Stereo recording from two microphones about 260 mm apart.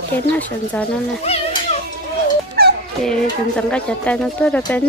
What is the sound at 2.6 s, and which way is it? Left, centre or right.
Fowl, right.